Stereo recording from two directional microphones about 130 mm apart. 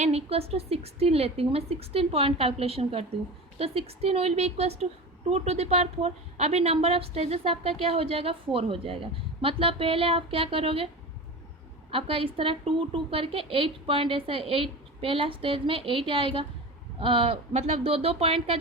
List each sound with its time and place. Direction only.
0.0 s a woman's voice: 50° right (ahead or behind)
11.9 s a woman's voice: 45° right (ahead or behind)